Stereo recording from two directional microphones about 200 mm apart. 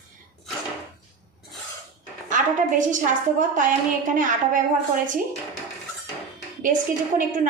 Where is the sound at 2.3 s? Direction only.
40° right (ahead or behind).